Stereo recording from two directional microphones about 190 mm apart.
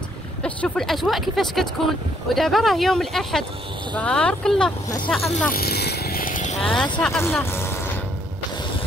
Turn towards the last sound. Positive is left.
turn(degrees=15)  # may be behind; listen again after turning